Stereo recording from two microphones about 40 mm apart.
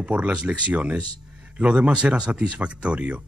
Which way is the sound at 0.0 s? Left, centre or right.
Right.